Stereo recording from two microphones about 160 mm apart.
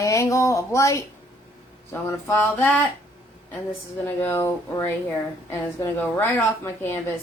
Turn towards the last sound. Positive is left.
turn(degrees=15)  # may be behind; listen again after turning